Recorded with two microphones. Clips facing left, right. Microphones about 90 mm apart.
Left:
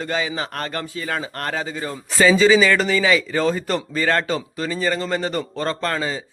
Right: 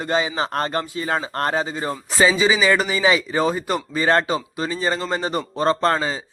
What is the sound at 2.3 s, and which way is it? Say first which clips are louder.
Speech: left 3 dB; 15° right (ahead or behind).